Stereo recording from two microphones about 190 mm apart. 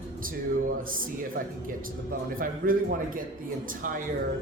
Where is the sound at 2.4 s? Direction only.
50° right (ahead or behind).